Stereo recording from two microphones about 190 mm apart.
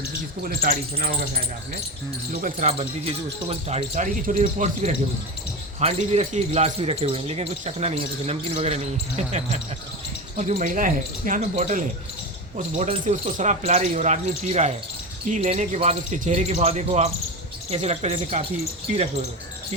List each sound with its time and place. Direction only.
0.4 s speech: 50° right (ahead or behind)
2.3 s speech: 40° right (ahead or behind)